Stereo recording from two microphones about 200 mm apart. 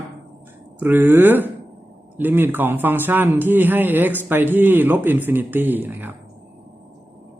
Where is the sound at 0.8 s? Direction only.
10° right (ahead or behind).